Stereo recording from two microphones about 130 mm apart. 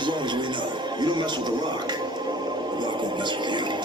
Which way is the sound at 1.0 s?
35° right (ahead or behind).